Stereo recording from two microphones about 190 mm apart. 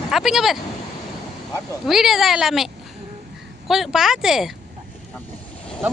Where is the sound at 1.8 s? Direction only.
Centre (ahead or behind).